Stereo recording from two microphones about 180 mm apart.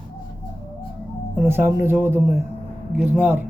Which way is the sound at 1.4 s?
10° right (ahead or behind).